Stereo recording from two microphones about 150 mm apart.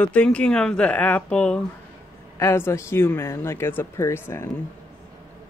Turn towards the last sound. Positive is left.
turn(degrees=15)  # may be behind; listen again after turning